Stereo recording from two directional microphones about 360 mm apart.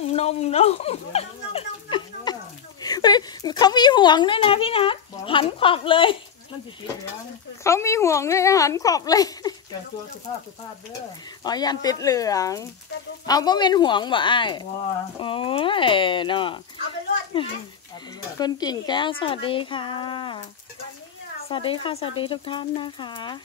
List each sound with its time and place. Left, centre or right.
0.0 s speech: centre
7.6 s speech: centre
11.4 s speech: centre
18.4 s speech: centre
21.5 s speech: centre